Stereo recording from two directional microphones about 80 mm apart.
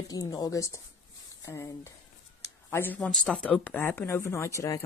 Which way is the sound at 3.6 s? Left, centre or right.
Left.